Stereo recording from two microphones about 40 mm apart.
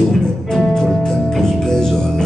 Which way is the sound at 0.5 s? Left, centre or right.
Centre.